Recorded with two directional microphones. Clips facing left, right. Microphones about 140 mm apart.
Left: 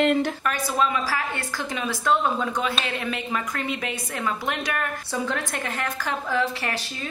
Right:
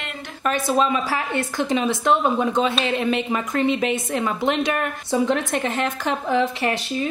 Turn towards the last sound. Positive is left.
turn(degrees=-20)  # may be behind; listen again after turning